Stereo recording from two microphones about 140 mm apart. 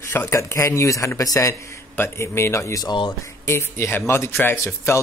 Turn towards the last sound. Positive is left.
turn(degrees=20)  # may be behind; listen again after turning